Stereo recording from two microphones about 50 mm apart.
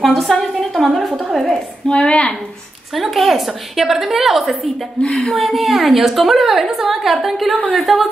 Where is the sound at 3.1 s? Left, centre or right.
Centre.